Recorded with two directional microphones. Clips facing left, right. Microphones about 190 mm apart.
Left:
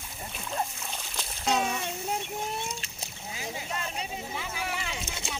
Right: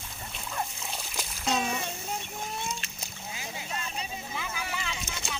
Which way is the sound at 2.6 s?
30° left (ahead or behind).